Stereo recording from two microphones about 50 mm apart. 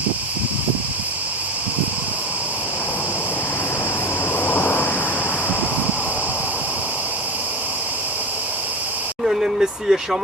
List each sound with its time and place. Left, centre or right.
4.4 s vehicle: left
9.2 s vehicle: centre